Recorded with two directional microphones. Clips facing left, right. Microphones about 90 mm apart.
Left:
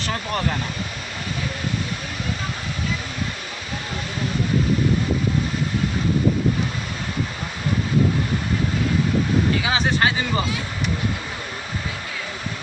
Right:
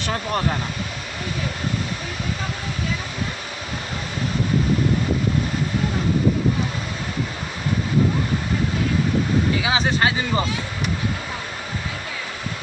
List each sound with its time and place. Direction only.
0.0 s speech: 15° right (ahead or behind)
9.6 s speech: 20° right (ahead or behind)